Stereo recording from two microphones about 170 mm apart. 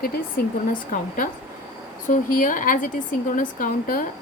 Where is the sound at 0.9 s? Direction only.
50° left (ahead or behind).